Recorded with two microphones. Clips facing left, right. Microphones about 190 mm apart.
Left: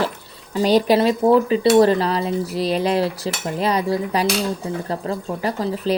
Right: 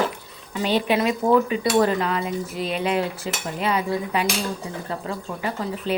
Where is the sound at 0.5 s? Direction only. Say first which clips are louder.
Left 6 dB; 40° left (ahead or behind).